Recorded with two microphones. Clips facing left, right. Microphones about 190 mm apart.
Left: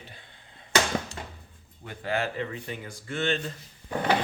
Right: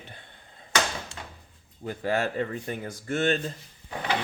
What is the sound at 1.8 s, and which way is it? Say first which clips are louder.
Speech: right 3 dB; 40° right (ahead or behind).